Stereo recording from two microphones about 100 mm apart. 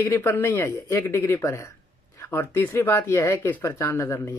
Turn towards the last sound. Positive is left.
turn(degrees=30)  # may be behind; listen again after turning